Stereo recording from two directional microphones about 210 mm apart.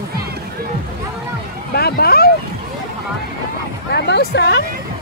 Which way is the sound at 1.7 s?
50° left (ahead or behind).